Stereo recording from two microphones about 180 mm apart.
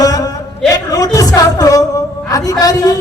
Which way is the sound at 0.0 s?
20° left (ahead or behind).